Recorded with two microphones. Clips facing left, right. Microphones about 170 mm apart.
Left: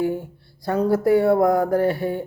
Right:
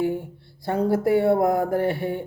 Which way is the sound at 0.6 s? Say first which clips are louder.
Left 2 dB; 25° right (ahead or behind).